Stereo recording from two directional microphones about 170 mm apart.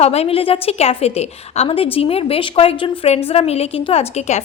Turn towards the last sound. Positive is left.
turn(degrees=40)  # may be behind; listen again after turning